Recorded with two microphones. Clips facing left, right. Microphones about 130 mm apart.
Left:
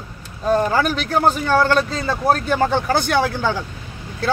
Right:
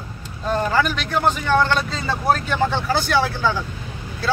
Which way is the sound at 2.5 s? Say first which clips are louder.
Left 3 dB; 50° left (ahead or behind).